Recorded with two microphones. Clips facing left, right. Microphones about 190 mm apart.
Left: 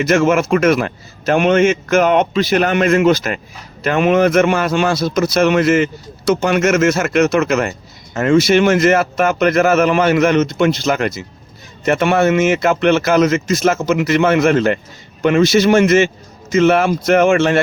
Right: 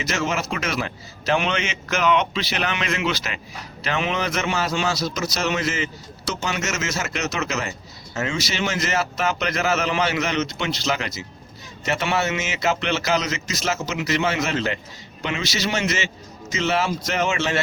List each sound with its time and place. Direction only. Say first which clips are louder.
0.0 s a man's voice: left 12 dB; 55° left (ahead or behind)